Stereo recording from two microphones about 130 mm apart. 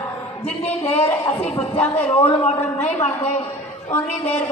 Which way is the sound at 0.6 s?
10° left (ahead or behind).